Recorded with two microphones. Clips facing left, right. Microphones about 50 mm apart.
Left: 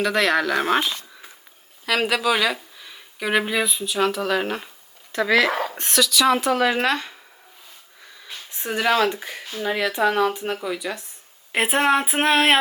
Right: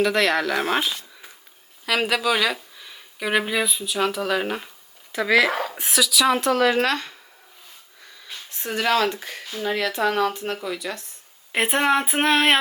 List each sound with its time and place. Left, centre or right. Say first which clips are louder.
0.0 s speech: even; centre
8.4 s speech: left 1 dB; centre